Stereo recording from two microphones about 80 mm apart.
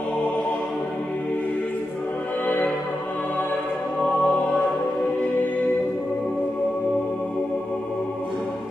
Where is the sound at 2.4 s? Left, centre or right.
Centre.